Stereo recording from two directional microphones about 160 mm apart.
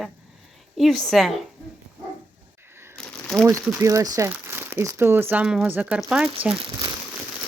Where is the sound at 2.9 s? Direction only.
5° left (ahead or behind).